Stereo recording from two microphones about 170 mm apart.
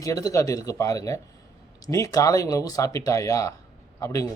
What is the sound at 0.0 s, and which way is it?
A man's voice, 20° left (ahead or behind).